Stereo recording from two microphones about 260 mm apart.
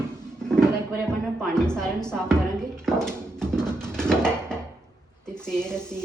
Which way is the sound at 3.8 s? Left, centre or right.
Centre.